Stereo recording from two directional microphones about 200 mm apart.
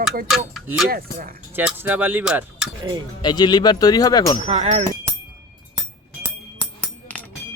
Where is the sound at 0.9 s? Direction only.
45° right (ahead or behind).